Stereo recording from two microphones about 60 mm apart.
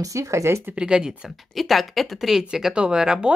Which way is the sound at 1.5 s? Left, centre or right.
Centre.